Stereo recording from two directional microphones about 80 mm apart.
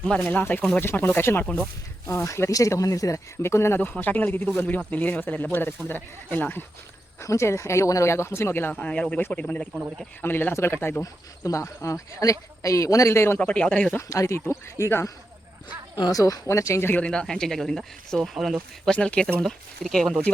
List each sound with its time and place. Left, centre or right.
0.2 s speech: left
2.2 s speech: left
3.8 s speech: left
7.2 s speech: left
8.7 s speech: centre; by 10.9 s left
11.0 s speech: left
13.4 s speech: centre
14.1 s speech: left
16.1 s speech: left
16.9 s speech: centre
18.9 s speech: centre